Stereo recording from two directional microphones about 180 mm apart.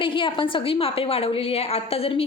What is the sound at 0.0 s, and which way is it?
A woman's voice, 25° left (ahead or behind).